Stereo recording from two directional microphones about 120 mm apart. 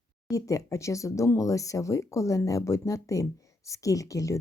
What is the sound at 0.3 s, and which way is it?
Speech, 25° left (ahead or behind).